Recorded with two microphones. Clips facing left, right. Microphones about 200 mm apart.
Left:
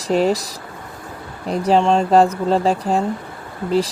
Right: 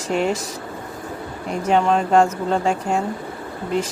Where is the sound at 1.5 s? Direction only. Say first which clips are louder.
Left 3 dB; 35° left (ahead or behind).